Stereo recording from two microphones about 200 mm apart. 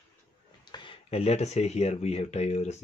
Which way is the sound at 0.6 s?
25° left (ahead or behind).